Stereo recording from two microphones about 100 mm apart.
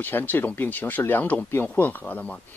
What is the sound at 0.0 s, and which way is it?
Speech, 20° left (ahead or behind).